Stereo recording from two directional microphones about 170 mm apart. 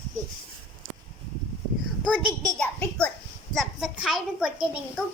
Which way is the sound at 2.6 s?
5° left (ahead or behind).